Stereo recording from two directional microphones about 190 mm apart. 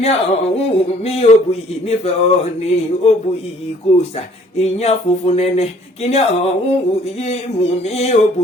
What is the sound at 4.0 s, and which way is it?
Speech, 35° left (ahead or behind).